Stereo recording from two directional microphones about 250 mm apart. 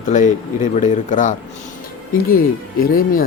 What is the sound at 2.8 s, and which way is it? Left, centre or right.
Speech, left.